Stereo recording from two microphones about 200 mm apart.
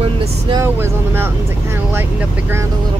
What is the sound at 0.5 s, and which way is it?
Speech, 15° right (ahead or behind).